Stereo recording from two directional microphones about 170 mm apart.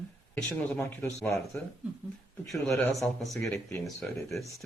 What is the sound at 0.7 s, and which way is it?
Speech, 15° left (ahead or behind).